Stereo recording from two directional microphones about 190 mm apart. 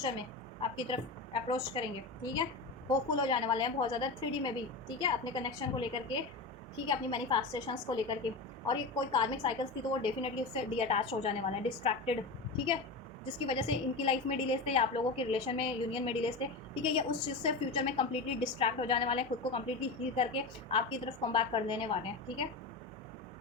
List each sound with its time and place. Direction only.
0.8 s a woman's voice: 25° left (ahead or behind)
13.4 s a woman's voice: 30° left (ahead or behind)